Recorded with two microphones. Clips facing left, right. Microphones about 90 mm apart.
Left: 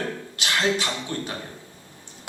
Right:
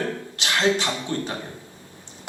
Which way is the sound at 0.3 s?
15° right (ahead or behind).